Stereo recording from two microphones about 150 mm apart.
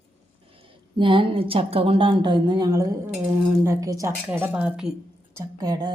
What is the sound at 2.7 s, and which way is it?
Speech, 20° right (ahead or behind).